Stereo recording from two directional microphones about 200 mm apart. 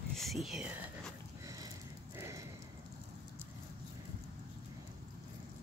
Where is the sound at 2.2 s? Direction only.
15° right (ahead or behind).